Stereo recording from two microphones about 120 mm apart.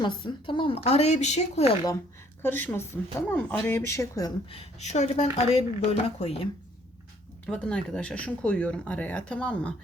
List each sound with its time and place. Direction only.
0.0 s speech: 40° left (ahead or behind); by 1.7 s 65° left (ahead or behind)
2.4 s speech: 15° left (ahead or behind)
4.4 s speech: 60° left (ahead or behind)
7.4 s speech: 5° left (ahead or behind)